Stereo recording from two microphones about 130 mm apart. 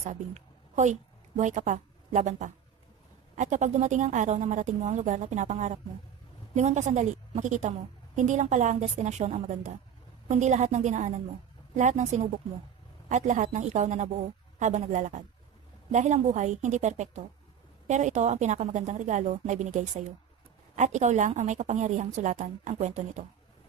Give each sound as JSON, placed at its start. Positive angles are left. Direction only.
{"t": 0.0, "sound": "a woman's voice", "side_deg": -65}